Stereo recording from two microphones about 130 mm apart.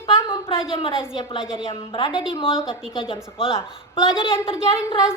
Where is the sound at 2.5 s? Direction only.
5° right (ahead or behind).